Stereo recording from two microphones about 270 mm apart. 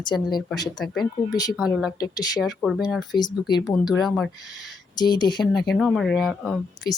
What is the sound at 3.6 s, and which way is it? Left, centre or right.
Speech, centre.